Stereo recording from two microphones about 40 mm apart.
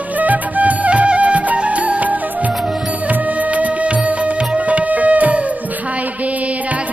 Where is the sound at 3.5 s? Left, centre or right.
Right.